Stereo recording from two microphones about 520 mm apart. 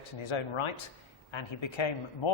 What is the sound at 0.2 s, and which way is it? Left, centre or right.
Speech, left.